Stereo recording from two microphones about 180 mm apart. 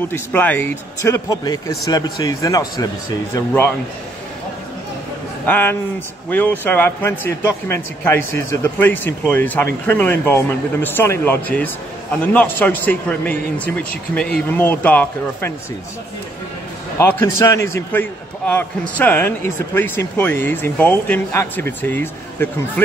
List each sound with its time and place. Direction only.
0.1 s a man's voice: 10° left (ahead or behind)
5.4 s a man's voice: 10° left (ahead or behind)
17.0 s speech: 15° left (ahead or behind)